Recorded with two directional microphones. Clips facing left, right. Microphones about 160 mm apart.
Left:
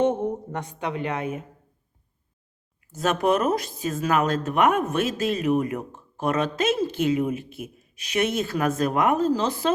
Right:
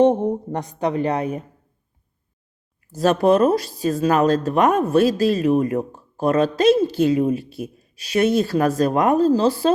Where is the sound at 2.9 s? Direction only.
35° right (ahead or behind).